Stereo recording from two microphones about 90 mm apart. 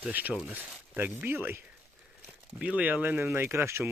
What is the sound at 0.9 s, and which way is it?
Speech, 25° right (ahead or behind).